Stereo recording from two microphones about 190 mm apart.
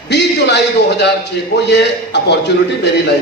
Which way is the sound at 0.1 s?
65° left (ahead or behind).